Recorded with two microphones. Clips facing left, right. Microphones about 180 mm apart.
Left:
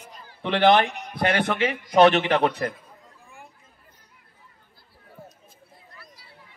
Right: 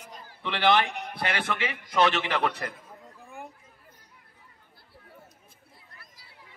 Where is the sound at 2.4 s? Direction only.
30° left (ahead or behind).